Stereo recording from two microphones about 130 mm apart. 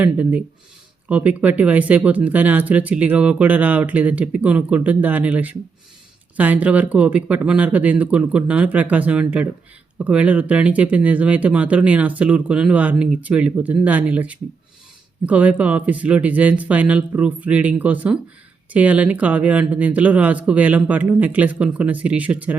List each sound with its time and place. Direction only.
0.0 s speech: 10° right (ahead or behind)